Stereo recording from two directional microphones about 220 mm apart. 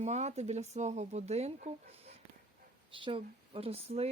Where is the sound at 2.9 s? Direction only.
25° right (ahead or behind).